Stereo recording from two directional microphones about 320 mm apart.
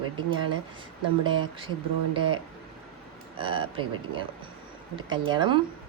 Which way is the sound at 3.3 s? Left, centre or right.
Centre.